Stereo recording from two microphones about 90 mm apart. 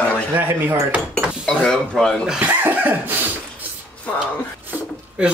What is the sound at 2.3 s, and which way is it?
Cough, 15° right (ahead or behind).